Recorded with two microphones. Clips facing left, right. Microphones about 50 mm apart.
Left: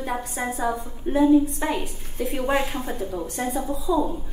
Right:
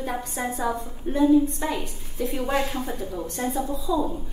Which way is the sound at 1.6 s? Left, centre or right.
Left.